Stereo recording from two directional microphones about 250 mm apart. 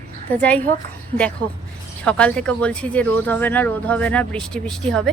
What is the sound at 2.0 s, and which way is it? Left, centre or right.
Speech, centre.